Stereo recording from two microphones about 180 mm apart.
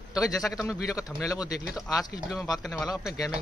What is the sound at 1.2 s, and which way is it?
Speech, 20° left (ahead or behind).